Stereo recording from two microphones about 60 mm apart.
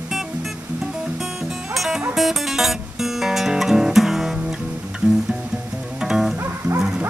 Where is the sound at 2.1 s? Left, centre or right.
Centre.